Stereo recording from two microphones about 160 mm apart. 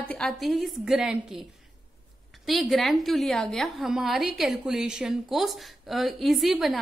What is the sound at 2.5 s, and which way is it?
A woman's voice, centre (ahead or behind).